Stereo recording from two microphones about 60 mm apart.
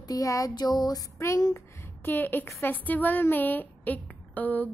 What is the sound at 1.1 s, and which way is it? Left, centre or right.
Speech, left.